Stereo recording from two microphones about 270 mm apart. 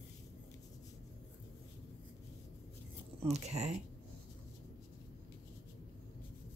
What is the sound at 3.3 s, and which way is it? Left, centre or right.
Speech, right.